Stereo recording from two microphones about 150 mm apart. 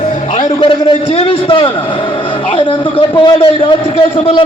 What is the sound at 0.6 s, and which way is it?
A man's voice, 35° left (ahead or behind).